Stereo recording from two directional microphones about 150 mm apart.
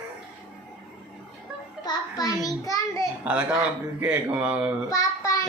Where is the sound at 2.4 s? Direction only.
25° left (ahead or behind).